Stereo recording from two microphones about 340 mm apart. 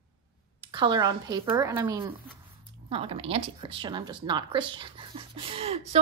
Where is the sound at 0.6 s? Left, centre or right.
Centre.